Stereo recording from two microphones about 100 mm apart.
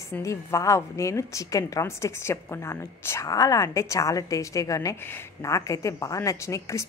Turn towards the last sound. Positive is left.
turn(degrees=30)  # may be behind; listen again after turning